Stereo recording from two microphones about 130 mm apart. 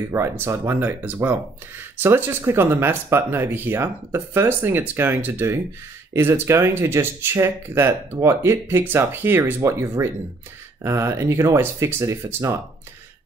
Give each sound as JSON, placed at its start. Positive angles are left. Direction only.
{"t": 0.1, "sound": "speech", "side_deg": -20}